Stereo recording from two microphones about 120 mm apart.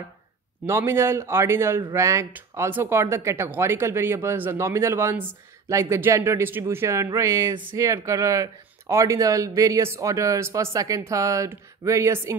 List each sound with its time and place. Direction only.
0.7 s speech: 20° right (ahead or behind)